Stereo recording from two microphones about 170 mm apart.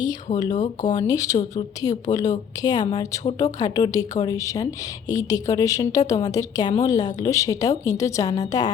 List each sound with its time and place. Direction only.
0.5 s speech: 45° left (ahead or behind)
0.9 s a woman's voice: 20° left (ahead or behind)